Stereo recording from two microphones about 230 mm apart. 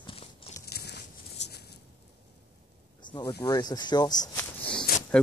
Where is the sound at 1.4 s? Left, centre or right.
Left.